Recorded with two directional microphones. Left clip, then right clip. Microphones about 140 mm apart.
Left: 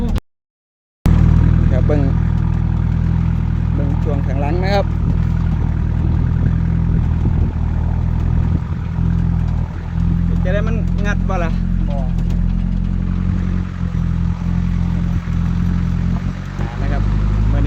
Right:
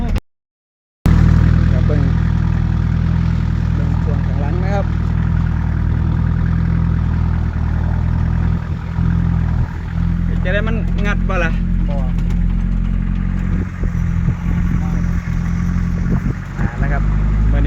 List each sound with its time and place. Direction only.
1.0 s vehicle: centre (ahead or behind)
4.4 s vehicle: 90° left
10.4 s vehicle: centre (ahead or behind)